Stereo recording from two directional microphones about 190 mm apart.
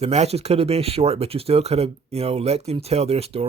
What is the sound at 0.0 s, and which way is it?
Speech, 35° right (ahead or behind).